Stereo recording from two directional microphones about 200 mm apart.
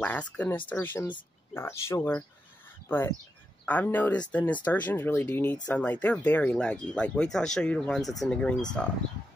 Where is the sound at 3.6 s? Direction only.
10° left (ahead or behind).